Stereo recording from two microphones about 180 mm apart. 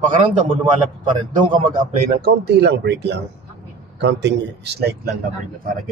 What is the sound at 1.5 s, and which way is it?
Speech, 55° right (ahead or behind).